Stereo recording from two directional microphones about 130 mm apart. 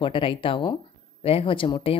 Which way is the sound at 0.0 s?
40° left (ahead or behind).